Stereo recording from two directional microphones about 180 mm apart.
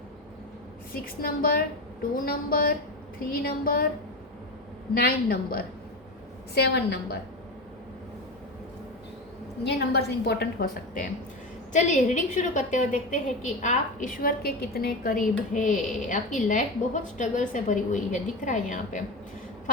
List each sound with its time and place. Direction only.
1.0 s a woman's voice: 55° left (ahead or behind)
4.9 s a woman's voice: 55° left (ahead or behind)
6.5 s a woman's voice: 65° left (ahead or behind)
9.6 s a woman's voice: 65° left (ahead or behind)
11.7 s a woman's voice: 45° left (ahead or behind)